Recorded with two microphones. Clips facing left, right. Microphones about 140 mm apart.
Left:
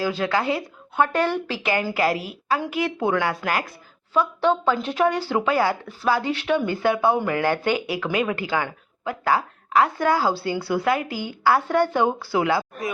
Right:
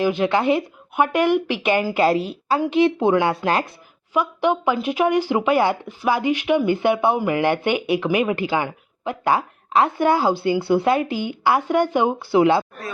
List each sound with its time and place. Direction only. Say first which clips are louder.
0.0 s speech: right 4 dB; 20° right (ahead or behind)
4.1 s speech: right 1 dB; 15° right (ahead or behind)